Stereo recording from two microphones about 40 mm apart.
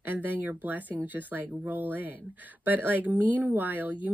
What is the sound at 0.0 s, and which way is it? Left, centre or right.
Speech, right.